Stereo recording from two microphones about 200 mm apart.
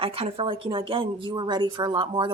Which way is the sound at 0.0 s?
30° right (ahead or behind).